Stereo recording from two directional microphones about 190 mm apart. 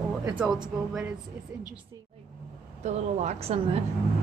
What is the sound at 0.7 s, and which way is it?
Speech, 5° right (ahead or behind).